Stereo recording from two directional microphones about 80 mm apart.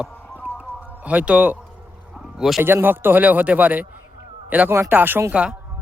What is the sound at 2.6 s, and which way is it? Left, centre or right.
Speech, right.